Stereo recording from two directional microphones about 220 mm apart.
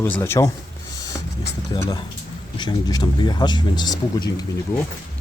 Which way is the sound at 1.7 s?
20° left (ahead or behind).